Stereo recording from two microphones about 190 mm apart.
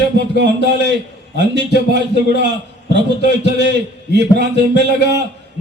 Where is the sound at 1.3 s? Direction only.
65° right (ahead or behind).